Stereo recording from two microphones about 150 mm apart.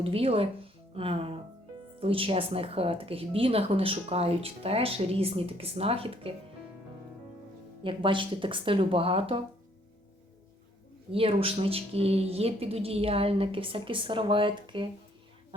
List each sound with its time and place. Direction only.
0.0 s speech: 40° right (ahead or behind)
7.9 s speech: 35° right (ahead or behind)
11.1 s speech: 40° right (ahead or behind)